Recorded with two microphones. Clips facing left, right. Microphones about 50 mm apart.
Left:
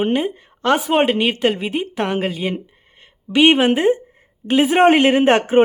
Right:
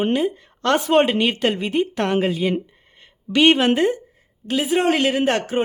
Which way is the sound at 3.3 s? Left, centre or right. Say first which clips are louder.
Left 2 dB; centre.